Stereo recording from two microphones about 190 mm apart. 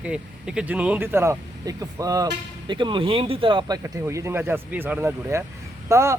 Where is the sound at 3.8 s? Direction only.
15° right (ahead or behind).